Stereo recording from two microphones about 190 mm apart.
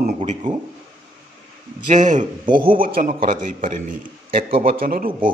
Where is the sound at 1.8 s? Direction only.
40° right (ahead or behind).